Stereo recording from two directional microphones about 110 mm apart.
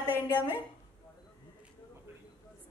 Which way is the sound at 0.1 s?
20° right (ahead or behind).